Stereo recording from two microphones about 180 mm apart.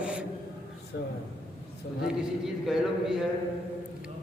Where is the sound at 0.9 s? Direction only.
70° left (ahead or behind).